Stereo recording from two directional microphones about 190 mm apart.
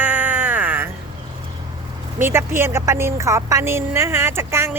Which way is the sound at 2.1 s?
10° right (ahead or behind).